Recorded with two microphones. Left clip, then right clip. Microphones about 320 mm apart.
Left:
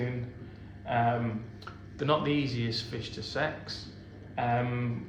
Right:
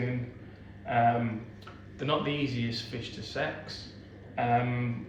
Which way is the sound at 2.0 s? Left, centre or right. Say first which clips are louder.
Left 2 dB; centre.